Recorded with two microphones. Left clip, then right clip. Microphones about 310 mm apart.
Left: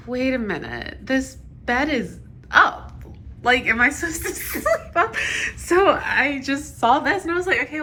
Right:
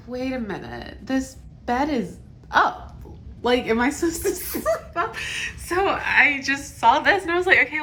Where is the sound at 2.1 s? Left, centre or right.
Centre.